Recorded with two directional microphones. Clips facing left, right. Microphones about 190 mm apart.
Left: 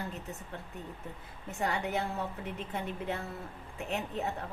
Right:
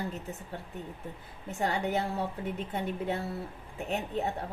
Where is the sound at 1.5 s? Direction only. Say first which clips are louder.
Right 3 dB; 35° right (ahead or behind).